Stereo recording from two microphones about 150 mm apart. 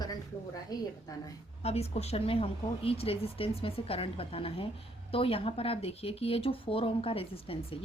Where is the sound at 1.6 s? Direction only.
45° left (ahead or behind).